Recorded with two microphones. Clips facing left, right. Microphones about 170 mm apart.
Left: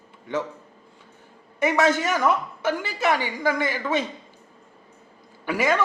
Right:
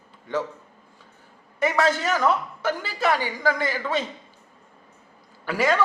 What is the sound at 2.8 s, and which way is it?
Speech, 15° left (ahead or behind).